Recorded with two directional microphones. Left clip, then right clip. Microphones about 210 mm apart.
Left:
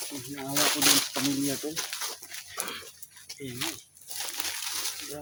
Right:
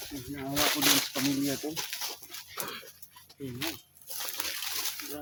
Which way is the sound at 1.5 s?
5° left (ahead or behind).